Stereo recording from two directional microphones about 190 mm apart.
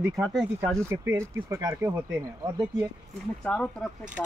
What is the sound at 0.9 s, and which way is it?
Speech, 15° right (ahead or behind).